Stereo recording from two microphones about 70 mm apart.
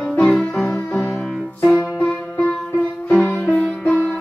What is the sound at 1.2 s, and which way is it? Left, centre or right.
Music, centre.